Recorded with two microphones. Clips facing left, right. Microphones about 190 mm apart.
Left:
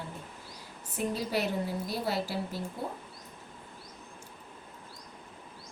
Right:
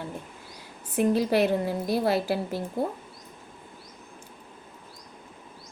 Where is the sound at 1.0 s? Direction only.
60° right (ahead or behind).